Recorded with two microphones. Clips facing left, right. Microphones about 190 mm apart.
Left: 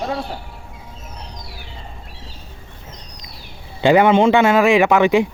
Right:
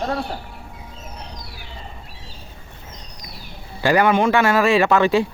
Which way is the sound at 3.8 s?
20° left (ahead or behind).